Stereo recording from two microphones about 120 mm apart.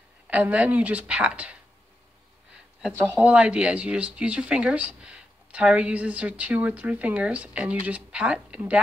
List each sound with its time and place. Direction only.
0.3 s speech: 10° right (ahead or behind)
3.0 s speech: 15° right (ahead or behind)